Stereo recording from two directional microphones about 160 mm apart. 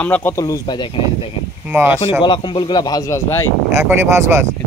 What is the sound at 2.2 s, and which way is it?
Speech, 30° left (ahead or behind).